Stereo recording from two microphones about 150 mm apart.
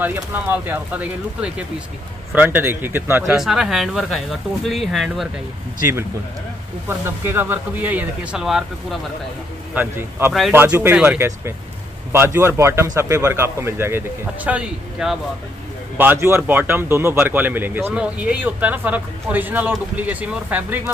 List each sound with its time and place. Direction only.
0.0 s a man's voice: 15° right (ahead or behind)
3.3 s speech: centre (ahead or behind)
6.9 s a man's voice: 15° right (ahead or behind)
9.8 s a man's voice: 15° right (ahead or behind)
16.0 s a man's voice: 15° right (ahead or behind)